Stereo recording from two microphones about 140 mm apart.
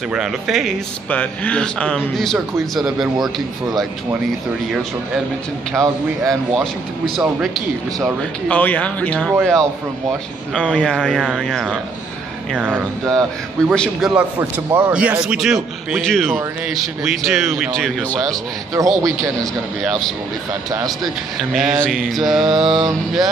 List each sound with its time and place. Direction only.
0.1 s speech: 5° right (ahead or behind)
5.7 s speech: 5° left (ahead or behind)
8.2 s speech: 10° left (ahead or behind)
10.5 s speech: 5° left (ahead or behind)
12.5 s speech: 10° right (ahead or behind)
13.0 s speech: centre (ahead or behind)
18.7 s a man's voice: 25° right (ahead or behind)
19.8 s speech: centre (ahead or behind)
20.7 s a man's voice: 30° right (ahead or behind)
21.4 s speech: centre (ahead or behind)